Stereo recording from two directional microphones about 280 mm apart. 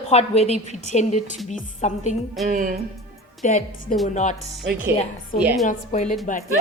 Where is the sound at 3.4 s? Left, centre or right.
Left.